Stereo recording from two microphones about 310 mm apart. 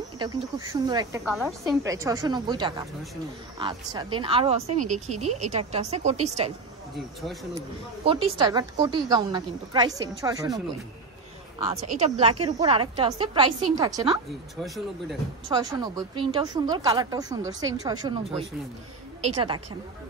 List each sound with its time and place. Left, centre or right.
0.2 s a woman's voice: centre
8.0 s a woman's voice: centre
11.6 s a woman's voice: centre
15.5 s a woman's voice: centre